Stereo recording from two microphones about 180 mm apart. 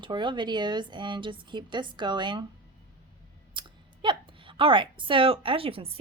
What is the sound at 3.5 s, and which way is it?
Speech, 25° right (ahead or behind).